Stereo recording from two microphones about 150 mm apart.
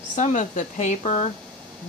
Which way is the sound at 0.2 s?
55° left (ahead or behind).